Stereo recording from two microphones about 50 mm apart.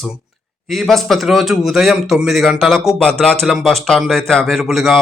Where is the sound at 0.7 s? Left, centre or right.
Centre.